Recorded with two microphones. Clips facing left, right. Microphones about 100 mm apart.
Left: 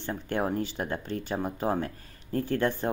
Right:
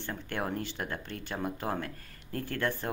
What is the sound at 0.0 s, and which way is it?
Speech, 20° left (ahead or behind).